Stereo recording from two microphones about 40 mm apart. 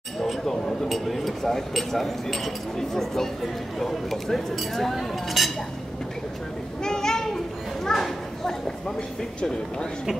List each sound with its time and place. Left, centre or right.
0.2 s a sound: centre
0.8 s speech: centre
6.8 s a child's voice: centre